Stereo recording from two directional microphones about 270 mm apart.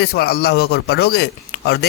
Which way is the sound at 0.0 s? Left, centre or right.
Left.